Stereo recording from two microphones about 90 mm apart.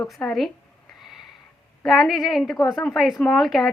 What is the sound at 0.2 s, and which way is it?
Speech, 15° left (ahead or behind).